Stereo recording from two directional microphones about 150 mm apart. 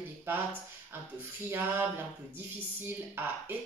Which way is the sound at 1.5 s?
15° right (ahead or behind).